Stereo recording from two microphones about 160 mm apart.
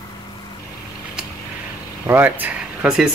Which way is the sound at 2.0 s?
10° right (ahead or behind).